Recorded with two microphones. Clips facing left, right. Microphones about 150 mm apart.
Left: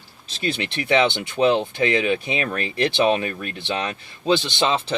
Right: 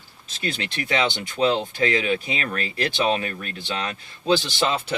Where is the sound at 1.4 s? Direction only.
20° left (ahead or behind).